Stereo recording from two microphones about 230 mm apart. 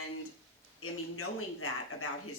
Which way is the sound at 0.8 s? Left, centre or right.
Left.